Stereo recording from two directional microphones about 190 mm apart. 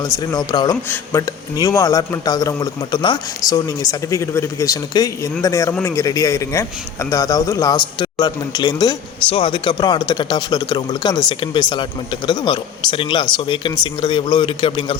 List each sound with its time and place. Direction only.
0.0 s a man's voice: 20° left (ahead or behind)